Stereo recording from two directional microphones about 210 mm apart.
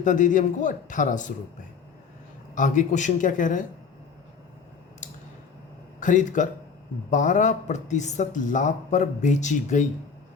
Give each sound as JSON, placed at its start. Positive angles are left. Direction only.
{"t": 0.0, "sound": "speech", "side_deg": 35}
{"t": 2.6, "sound": "speech", "side_deg": 35}
{"t": 6.0, "sound": "speech", "side_deg": 35}